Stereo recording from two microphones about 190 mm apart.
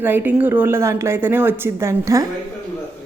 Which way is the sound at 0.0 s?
10° right (ahead or behind).